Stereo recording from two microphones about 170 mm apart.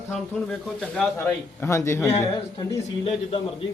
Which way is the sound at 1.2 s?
15° left (ahead or behind).